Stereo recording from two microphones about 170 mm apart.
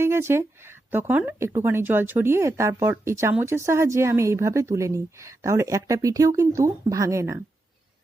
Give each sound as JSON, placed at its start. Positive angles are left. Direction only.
{"t": 0.0, "sound": "speech", "side_deg": -15}